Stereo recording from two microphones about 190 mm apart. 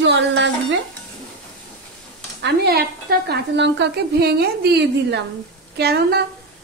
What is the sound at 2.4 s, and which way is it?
Speech, 60° right (ahead or behind).